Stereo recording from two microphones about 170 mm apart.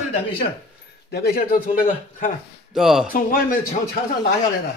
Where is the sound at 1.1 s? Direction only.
70° left (ahead or behind).